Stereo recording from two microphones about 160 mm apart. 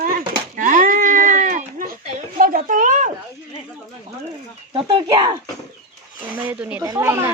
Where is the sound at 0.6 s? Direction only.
55° right (ahead or behind).